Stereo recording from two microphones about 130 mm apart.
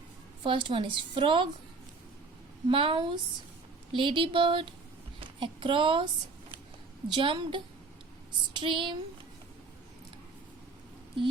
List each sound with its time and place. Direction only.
0.4 s speech: 40° right (ahead or behind)
2.6 s speech: 40° right (ahead or behind)
7.1 s speech: 40° right (ahead or behind)